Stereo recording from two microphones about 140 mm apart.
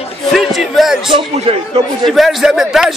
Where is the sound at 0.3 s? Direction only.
Centre (ahead or behind).